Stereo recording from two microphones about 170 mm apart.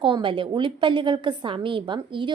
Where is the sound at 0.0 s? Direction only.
30° right (ahead or behind).